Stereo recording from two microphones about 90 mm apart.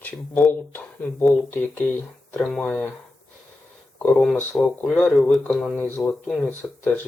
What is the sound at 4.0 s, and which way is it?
Speech, 5° left (ahead or behind).